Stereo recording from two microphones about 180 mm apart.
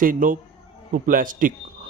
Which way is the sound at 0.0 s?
50° right (ahead or behind).